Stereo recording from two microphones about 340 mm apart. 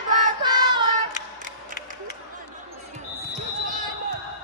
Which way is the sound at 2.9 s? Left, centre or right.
Right.